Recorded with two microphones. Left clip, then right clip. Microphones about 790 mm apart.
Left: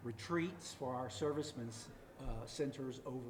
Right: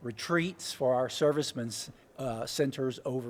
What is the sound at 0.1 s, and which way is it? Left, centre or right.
Speech, right.